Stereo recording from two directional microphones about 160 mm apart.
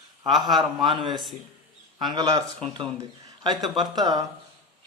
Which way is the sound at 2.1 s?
25° right (ahead or behind).